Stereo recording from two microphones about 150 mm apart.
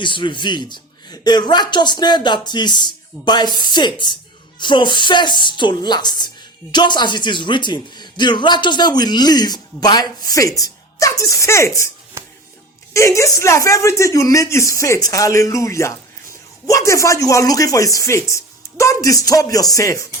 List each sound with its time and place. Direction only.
0.0 s a woman's voice: 35° left (ahead or behind)
12.2 s music: 15° right (ahead or behind)
12.9 s a woman's voice: 20° left (ahead or behind)